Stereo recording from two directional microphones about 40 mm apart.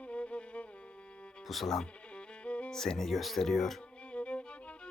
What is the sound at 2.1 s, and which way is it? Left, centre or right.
Music, left.